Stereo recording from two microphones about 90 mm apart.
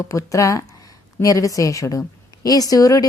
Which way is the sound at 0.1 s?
35° left (ahead or behind).